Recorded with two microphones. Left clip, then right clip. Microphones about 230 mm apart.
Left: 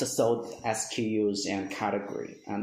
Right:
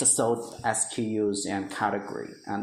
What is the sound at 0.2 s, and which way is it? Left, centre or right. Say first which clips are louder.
Speech: even; right.